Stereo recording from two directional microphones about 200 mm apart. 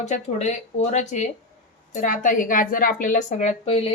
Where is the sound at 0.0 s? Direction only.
35° left (ahead or behind).